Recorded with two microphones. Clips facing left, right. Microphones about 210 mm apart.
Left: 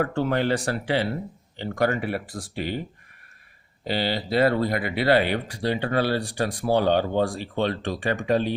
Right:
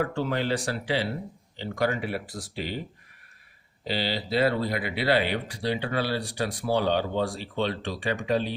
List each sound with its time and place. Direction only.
0.0 s speech: 50° left (ahead or behind)
3.8 s speech: 50° left (ahead or behind)